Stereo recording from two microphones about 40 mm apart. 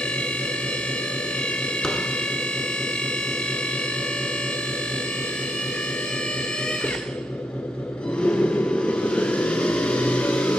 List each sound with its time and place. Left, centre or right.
8.2 s vehicle: left